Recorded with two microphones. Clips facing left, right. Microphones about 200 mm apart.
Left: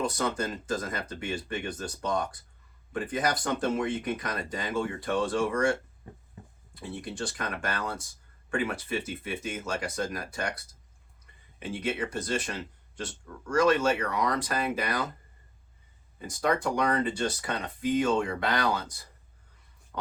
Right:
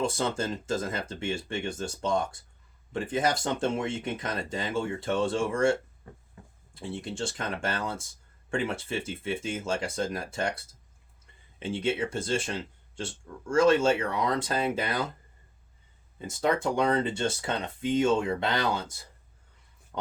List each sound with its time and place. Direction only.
0.0 s speech: 25° right (ahead or behind)
6.7 s speech: 25° right (ahead or behind)
16.1 s speech: 25° right (ahead or behind)